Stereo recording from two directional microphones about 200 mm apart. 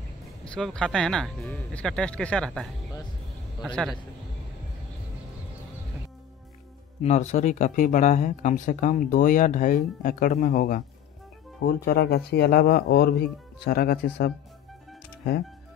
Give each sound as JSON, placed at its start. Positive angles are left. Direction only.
{"t": 0.5, "sound": "speech", "side_deg": 5}
{"t": 7.0, "sound": "speech", "side_deg": 35}